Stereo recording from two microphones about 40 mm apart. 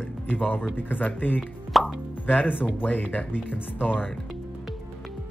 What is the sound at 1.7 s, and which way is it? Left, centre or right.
Plop, centre.